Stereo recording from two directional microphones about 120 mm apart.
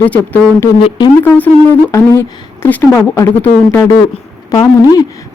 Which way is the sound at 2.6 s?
15° left (ahead or behind).